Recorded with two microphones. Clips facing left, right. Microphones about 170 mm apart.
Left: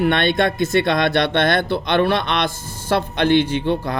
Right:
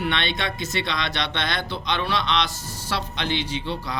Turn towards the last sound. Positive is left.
turn(degrees=55)  # may be behind; listen again after turning